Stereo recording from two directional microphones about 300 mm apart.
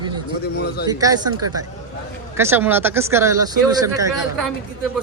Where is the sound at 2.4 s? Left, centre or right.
Centre.